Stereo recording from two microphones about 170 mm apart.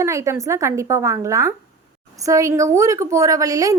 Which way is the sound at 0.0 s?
15° right (ahead or behind).